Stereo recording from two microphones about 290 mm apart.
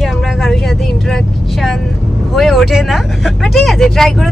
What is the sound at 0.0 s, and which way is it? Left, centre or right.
Vehicle, centre.